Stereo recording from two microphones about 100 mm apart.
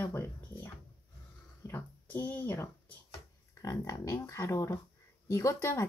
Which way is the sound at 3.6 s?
35° left (ahead or behind).